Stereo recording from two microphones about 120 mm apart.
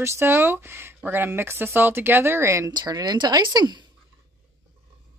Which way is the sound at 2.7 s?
35° right (ahead or behind).